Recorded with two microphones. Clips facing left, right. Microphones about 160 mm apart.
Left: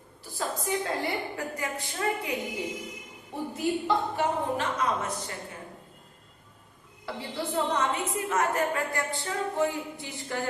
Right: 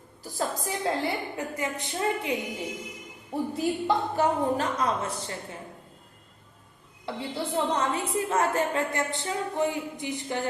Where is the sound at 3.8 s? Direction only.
35° right (ahead or behind).